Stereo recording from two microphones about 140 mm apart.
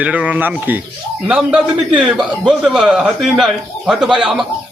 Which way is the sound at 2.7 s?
5° right (ahead or behind).